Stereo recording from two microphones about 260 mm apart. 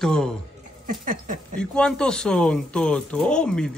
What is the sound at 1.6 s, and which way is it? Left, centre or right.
Speech, centre.